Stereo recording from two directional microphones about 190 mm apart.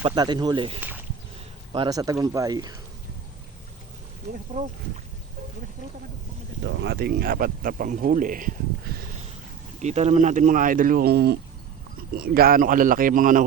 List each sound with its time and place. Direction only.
0.0 s speech: 20° right (ahead or behind)
0.8 s a sound: 10° right (ahead or behind)
1.7 s speech: 25° right (ahead or behind)
4.5 s speech: 45° right (ahead or behind)
6.7 s speech: 65° right (ahead or behind); by 8.5 s 45° right (ahead or behind)
9.8 s speech: 35° right (ahead or behind)